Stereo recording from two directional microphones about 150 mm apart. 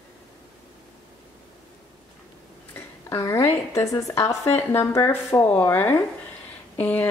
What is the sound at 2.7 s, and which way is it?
A woman's voice, 20° left (ahead or behind).